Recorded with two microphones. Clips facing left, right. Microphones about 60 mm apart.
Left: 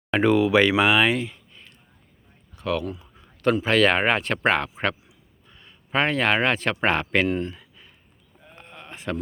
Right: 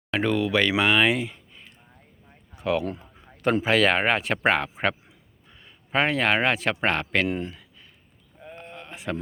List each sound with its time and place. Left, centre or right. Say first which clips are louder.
0.1 s speech: left 5 dB; centre
2.8 s speech: right 1 dB; right
3.6 s speech: left 1 dB; centre
7.3 s speech: left 3 dB; centre
7.5 s a sound: left 1 dB; centre
8.5 s sheep: even; centre